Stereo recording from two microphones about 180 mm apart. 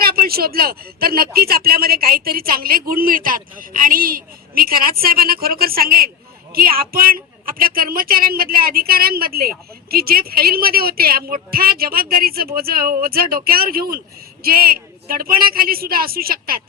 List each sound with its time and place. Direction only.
0.0 s speech: 55° right (ahead or behind)